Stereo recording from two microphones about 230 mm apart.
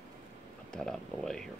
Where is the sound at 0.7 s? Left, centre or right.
Centre.